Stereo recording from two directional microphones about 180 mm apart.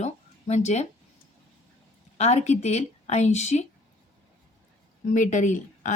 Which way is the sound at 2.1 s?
40° left (ahead or behind).